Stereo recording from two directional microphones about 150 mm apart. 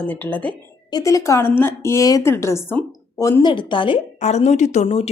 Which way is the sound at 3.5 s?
35° left (ahead or behind).